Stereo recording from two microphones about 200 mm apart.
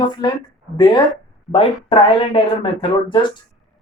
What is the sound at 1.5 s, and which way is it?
Speech, 25° left (ahead or behind).